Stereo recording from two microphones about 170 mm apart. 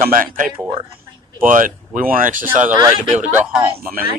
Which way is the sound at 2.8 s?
20° right (ahead or behind).